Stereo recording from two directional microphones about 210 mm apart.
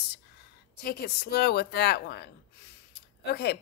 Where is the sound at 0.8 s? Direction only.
50° left (ahead or behind).